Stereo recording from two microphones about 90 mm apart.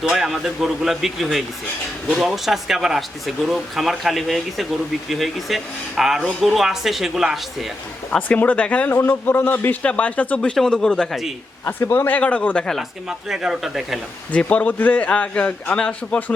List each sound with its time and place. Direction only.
0.0 s speech: 5° right (ahead or behind)
8.1 s speech: 15° left (ahead or behind)
11.6 s speech: 25° left (ahead or behind); by 12.8 s 10° left (ahead or behind)
13.1 s speech: 5° right (ahead or behind)
14.3 s speech: 15° left (ahead or behind)